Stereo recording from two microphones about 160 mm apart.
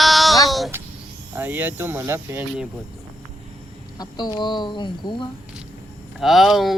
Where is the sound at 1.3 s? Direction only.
10° right (ahead or behind).